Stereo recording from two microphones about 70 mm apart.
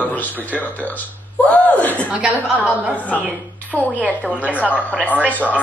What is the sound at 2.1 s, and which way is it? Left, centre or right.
Speech, centre.